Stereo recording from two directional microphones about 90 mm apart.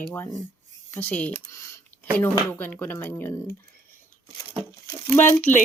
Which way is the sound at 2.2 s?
20° left (ahead or behind).